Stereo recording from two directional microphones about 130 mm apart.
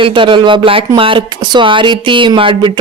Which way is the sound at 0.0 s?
40° right (ahead or behind).